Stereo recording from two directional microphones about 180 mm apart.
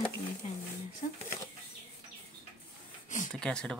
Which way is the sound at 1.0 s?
50° left (ahead or behind).